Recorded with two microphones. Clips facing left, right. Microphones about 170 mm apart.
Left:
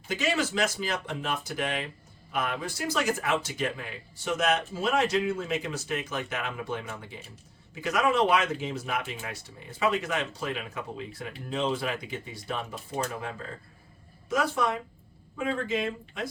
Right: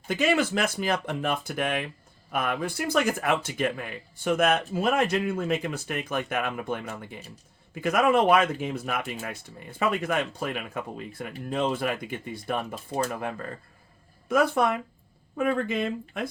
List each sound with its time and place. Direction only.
0.1 s speech: 55° right (ahead or behind)
14.3 s speech: 55° right (ahead or behind)